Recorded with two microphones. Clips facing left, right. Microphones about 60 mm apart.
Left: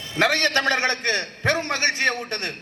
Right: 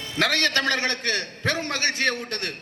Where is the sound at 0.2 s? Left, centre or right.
Left.